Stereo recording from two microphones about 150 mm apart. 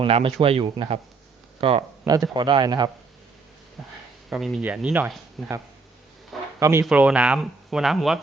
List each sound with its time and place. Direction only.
0.0 s a man's voice: 40° right (ahead or behind)
3.8 s speech: centre (ahead or behind)
6.6 s speech: 15° right (ahead or behind); by 8.2 s centre (ahead or behind)